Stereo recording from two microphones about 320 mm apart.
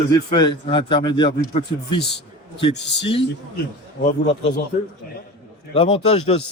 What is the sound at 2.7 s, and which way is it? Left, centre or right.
A man's voice, left.